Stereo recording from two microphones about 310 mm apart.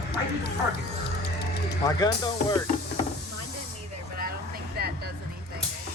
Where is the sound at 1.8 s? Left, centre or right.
Centre.